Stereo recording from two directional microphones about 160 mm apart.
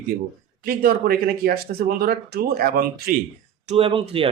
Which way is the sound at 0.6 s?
65° right (ahead or behind).